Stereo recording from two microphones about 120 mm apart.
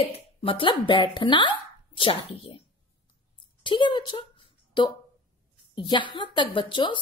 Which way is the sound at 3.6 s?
40° left (ahead or behind).